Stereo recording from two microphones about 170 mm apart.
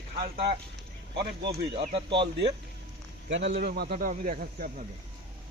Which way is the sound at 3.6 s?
70° right (ahead or behind).